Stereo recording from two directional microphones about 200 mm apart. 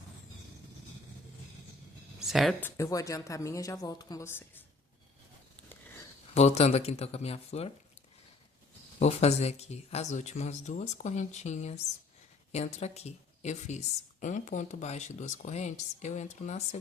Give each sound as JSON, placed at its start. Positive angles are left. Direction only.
{"t": 2.2, "sound": "speech", "side_deg": 0}
{"t": 6.3, "sound": "speech", "side_deg": 30}
{"t": 9.0, "sound": "speech", "side_deg": 35}